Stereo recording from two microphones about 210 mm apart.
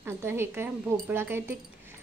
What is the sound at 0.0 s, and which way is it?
A woman's voice, 10° right (ahead or behind).